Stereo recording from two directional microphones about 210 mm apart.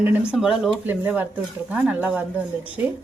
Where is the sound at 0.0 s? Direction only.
5° right (ahead or behind).